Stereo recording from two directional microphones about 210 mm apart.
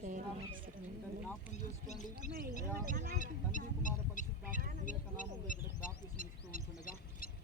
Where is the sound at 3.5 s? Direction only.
40° left (ahead or behind).